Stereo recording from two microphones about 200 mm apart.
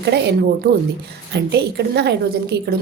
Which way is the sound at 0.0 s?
55° right (ahead or behind).